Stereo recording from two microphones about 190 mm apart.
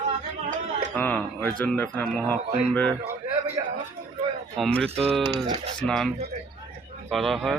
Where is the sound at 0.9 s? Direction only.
5° left (ahead or behind).